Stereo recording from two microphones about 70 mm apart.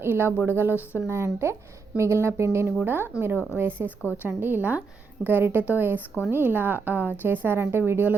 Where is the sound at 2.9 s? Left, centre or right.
Right.